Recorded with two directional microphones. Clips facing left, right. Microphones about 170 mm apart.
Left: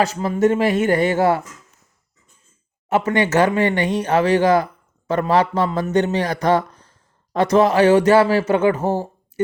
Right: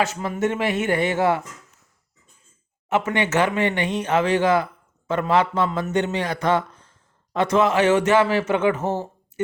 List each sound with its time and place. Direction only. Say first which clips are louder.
0.0 s speech: left 5 dB; 35° left (ahead or behind)
2.9 s speech: left 4 dB; 40° left (ahead or behind)